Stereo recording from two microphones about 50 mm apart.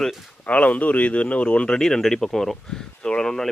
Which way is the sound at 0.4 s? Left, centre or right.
Left.